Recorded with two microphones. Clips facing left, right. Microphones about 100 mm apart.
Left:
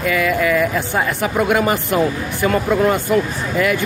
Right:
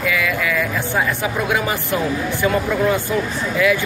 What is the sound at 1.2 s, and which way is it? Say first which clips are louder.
Speech: left 4 dB; 50° left (ahead or behind).